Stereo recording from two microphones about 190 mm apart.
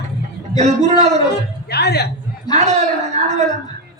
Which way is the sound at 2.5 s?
35° right (ahead or behind).